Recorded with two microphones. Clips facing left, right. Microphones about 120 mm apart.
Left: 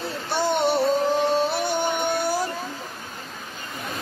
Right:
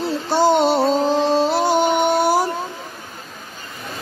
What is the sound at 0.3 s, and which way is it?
Music, 90° right.